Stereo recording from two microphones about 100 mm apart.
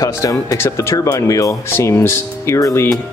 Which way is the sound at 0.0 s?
35° left (ahead or behind).